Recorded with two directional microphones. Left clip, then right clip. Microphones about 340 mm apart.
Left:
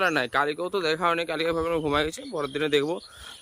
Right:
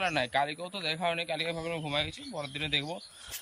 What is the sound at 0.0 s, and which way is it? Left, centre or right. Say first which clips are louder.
Speech: left 5 dB; centre.